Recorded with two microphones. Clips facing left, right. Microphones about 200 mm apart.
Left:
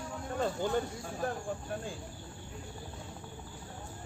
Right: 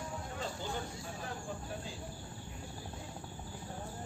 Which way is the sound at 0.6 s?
50° left (ahead or behind).